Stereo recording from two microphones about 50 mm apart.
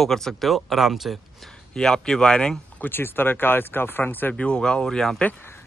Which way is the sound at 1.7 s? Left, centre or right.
Centre.